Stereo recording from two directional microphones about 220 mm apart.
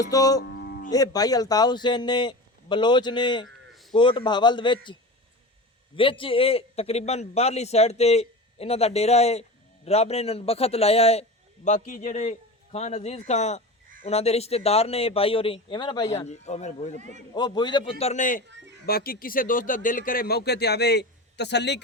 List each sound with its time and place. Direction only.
0.1 s speech: 15° left (ahead or behind)
0.4 s music: 50° left (ahead or behind)
0.9 s a man's voice: 15° left (ahead or behind)
6.0 s a man's voice: 25° left (ahead or behind)
17.0 s a man's voice: 35° right (ahead or behind)
17.3 s a man's voice: 20° left (ahead or behind); by 18.4 s 35° left (ahead or behind)
18.4 s speech: 55° right (ahead or behind)
18.9 s speech: 40° left (ahead or behind)